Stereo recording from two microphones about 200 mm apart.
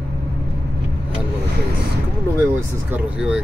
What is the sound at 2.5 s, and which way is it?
Speech, 5° right (ahead or behind).